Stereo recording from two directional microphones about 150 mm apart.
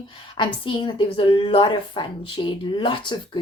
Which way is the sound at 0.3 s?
35° left (ahead or behind).